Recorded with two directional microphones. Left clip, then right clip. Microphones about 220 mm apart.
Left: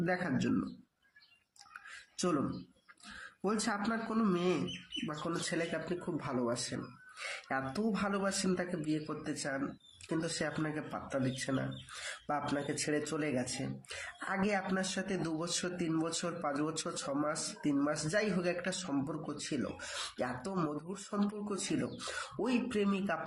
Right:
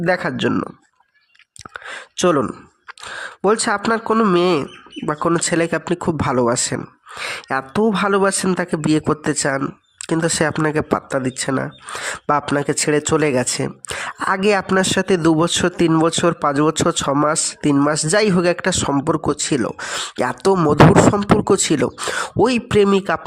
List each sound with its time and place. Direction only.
0.0 s speech: 45° right (ahead or behind)
2.1 s speech: 45° right (ahead or behind)
3.4 s speech: 45° right (ahead or behind)